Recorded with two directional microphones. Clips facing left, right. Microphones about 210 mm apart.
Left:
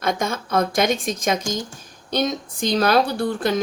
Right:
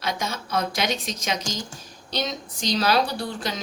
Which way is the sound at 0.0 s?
50° left (ahead or behind).